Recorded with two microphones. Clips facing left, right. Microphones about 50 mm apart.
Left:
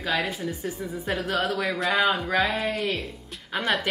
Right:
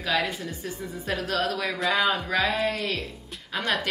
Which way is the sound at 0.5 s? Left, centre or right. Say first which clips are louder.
Left 3 dB; centre.